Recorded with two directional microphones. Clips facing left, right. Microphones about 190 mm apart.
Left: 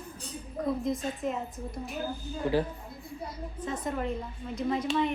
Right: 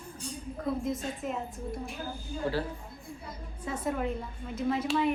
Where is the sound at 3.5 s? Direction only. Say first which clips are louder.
Right 1 dB; 10° right (ahead or behind).